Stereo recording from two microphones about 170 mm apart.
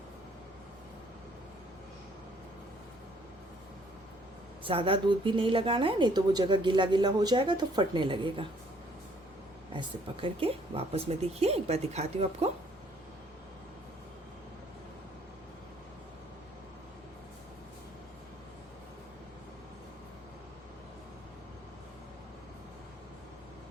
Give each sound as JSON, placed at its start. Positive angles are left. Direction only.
{"t": 4.6, "sound": "a woman's voice", "side_deg": -30}
{"t": 9.7, "sound": "a woman's voice", "side_deg": -30}